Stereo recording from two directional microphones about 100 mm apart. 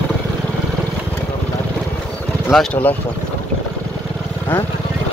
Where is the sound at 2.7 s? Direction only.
15° left (ahead or behind).